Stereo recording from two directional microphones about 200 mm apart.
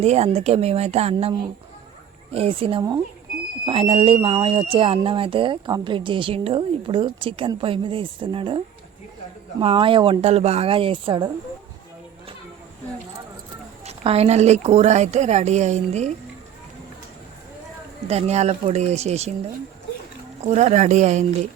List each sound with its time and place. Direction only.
0.0 s a woman's voice: 30° right (ahead or behind)
2.3 s speech: 30° right (ahead or behind)
13.8 s a woman's voice: 30° right (ahead or behind)
18.1 s a woman's voice: 35° right (ahead or behind)
20.5 s a woman's voice: 35° right (ahead or behind)